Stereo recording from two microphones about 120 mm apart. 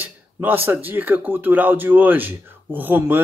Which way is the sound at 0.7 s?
15° right (ahead or behind).